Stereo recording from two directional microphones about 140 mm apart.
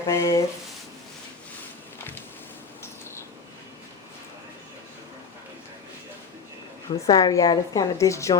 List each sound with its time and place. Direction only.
0.1 s a woman's voice: 25° left (ahead or behind)
6.9 s a woman's voice: 25° left (ahead or behind)